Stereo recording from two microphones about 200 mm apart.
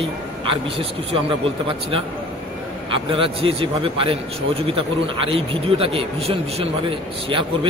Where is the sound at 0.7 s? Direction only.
25° right (ahead or behind).